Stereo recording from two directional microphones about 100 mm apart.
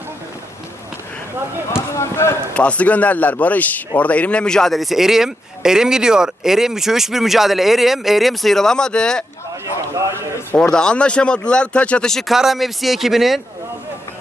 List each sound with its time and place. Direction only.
1.9 s speech: 25° left (ahead or behind)
2.6 s a man's voice: 15° left (ahead or behind)
10.6 s a man's voice: 10° left (ahead or behind)